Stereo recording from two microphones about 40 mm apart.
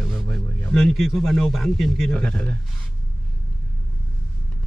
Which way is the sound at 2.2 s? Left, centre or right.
Left.